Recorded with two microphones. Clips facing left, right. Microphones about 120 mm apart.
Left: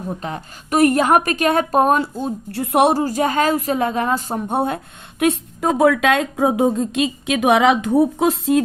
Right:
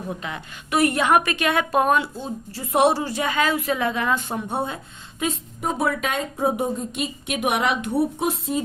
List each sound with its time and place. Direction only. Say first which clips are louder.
0.1 s a woman's voice: left 4 dB; 40° left (ahead or behind)
2.5 s a woman's voice: left 3 dB; 60° left (ahead or behind); by 4.5 s 40° left (ahead or behind)
4.5 s speech: left 7 dB; 55° left (ahead or behind)
5.2 s a woman's voice: left 8 dB; 75° left (ahead or behind); by 8.6 s 90° left